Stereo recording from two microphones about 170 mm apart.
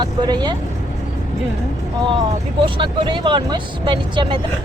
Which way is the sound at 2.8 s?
25° right (ahead or behind).